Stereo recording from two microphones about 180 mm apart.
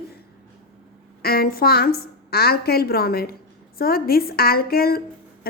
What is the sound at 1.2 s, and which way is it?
A woman's voice, 60° left (ahead or behind).